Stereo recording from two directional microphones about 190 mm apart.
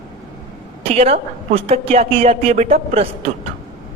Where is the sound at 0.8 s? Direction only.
30° right (ahead or behind).